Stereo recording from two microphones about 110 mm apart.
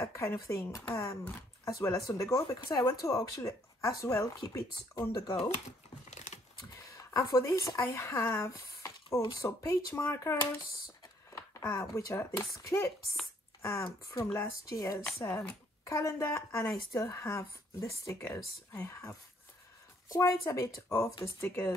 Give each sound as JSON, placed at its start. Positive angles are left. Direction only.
{"t": 0.0, "sound": "a woman's voice", "side_deg": 25}
{"t": 6.0, "sound": "crumpling", "side_deg": 90}
{"t": 6.8, "sound": "a woman's voice", "side_deg": 30}
{"t": 11.2, "sound": "a sound", "side_deg": 30}
{"t": 11.6, "sound": "a woman's voice", "side_deg": 25}
{"t": 15.2, "sound": "speech", "side_deg": 15}
{"t": 15.8, "sound": "a woman's voice", "side_deg": 30}